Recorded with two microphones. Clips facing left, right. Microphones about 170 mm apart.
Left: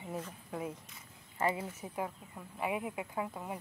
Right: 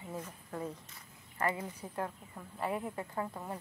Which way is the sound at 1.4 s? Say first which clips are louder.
Left 1 dB; 15° left (ahead or behind).